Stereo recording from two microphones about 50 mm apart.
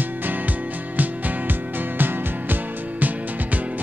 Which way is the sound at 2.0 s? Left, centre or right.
Right.